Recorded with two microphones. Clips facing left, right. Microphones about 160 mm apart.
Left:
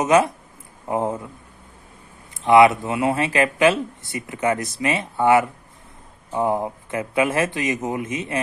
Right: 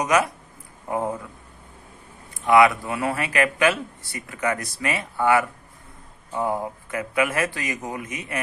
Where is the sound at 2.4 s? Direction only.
25° left (ahead or behind).